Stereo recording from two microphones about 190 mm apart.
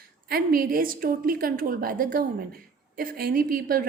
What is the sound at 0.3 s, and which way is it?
A woman's voice, 50° right (ahead or behind).